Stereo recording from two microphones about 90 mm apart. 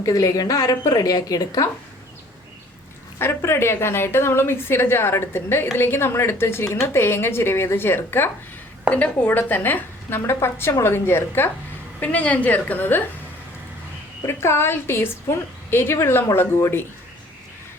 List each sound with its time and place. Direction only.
0.0 s a woman's voice: 40° left (ahead or behind)
3.2 s a woman's voice: 25° left (ahead or behind)
14.3 s a woman's voice: 30° left (ahead or behind)